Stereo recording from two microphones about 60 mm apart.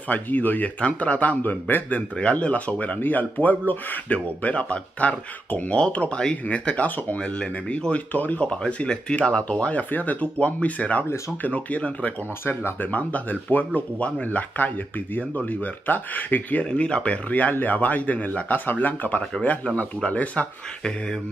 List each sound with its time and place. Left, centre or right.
0.1 s speech: left